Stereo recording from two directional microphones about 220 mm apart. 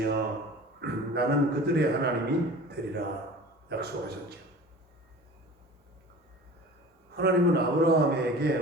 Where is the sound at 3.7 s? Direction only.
45° right (ahead or behind).